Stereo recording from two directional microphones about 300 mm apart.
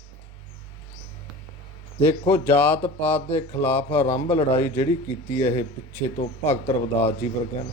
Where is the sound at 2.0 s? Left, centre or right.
Centre.